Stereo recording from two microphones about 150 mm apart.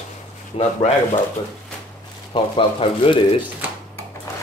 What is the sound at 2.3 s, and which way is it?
Speech, 40° left (ahead or behind).